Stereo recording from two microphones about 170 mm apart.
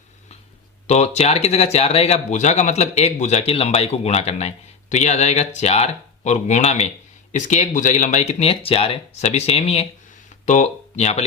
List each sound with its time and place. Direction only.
0.9 s speech: 40° left (ahead or behind)